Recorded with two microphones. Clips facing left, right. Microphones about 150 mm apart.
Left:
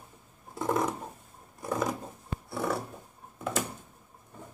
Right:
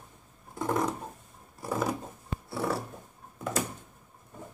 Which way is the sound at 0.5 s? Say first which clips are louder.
Even; 5° left (ahead or behind).